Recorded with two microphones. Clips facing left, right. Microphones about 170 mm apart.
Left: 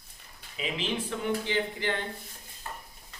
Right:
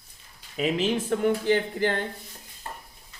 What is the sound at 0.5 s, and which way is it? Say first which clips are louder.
Speech: right 8 dB; 45° right (ahead or behind).